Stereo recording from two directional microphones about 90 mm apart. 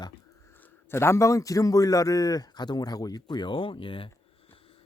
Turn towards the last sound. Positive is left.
turn(degrees=75)  # may be behind; listen again after turning